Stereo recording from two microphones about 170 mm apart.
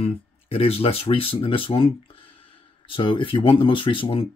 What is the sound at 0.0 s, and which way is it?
Speech, 35° left (ahead or behind).